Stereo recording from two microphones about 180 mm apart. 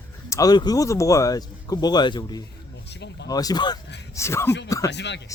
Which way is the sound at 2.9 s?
75° left (ahead or behind).